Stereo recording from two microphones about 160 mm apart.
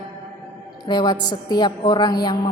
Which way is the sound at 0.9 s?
25° left (ahead or behind).